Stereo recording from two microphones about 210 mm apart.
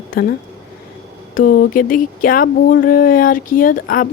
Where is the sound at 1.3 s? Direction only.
40° left (ahead or behind).